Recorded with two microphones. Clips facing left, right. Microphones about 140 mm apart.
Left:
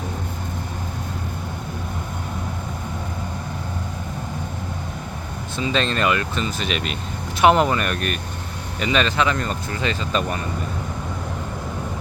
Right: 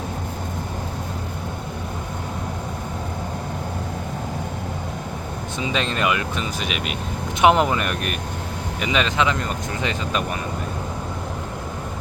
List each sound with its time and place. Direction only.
5.5 s speech: 15° right (ahead or behind)